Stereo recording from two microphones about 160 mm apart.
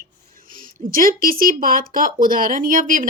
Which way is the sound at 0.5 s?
60° right (ahead or behind).